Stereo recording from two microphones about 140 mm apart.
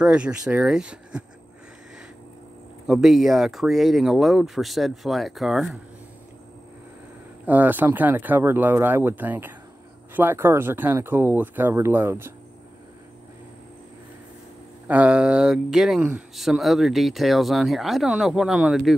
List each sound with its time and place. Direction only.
0.0 s speech: 10° right (ahead or behind)
2.9 s speech: 5° right (ahead or behind)
7.4 s speech: 10° right (ahead or behind)
14.9 s speech: 10° right (ahead or behind)